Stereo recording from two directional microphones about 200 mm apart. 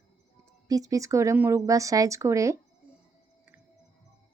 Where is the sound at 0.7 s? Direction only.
15° right (ahead or behind).